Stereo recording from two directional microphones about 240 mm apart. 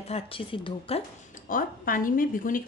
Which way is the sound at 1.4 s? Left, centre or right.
Left.